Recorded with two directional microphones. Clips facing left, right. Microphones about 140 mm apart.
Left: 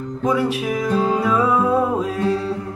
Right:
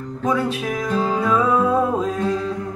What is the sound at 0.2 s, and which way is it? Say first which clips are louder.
Music: left 1 dB; 10° left (ahead or behind).